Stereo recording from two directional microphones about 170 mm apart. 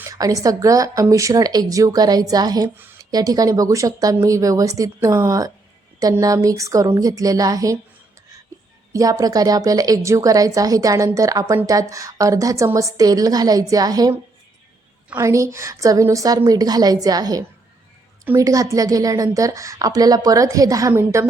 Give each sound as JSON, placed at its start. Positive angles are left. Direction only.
{"t": 0.0, "sound": "a woman's voice", "side_deg": -20}
{"t": 8.9, "sound": "a woman's voice", "side_deg": -20}